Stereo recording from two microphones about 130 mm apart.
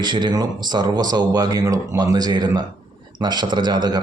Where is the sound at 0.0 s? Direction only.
35° right (ahead or behind).